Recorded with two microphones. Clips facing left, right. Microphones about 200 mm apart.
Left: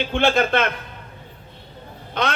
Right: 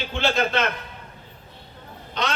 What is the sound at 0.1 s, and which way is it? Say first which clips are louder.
Speech: left 4 dB; 55° left (ahead or behind).